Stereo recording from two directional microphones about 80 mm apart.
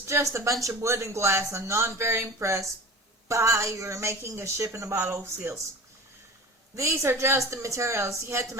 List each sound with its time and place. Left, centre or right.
0.1 s speech: right
6.7 s speech: right